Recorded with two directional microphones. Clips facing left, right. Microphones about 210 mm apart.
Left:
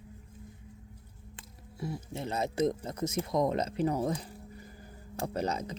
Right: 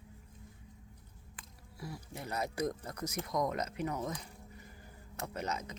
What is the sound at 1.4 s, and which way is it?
Speech, 25° left (ahead or behind).